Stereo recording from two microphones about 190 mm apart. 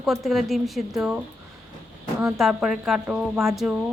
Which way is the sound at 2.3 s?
Centre (ahead or behind).